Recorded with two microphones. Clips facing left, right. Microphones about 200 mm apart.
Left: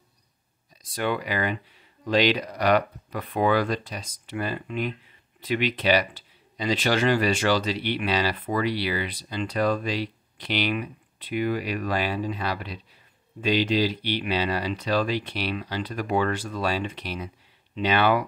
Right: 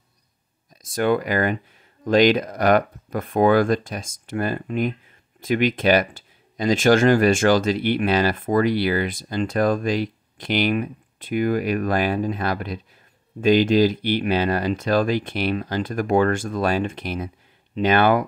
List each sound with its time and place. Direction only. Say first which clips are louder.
0.8 s speech: right 7 dB; 45° right (ahead or behind)